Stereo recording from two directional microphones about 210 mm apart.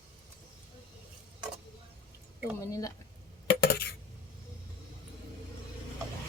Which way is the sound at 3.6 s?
50° left (ahead or behind).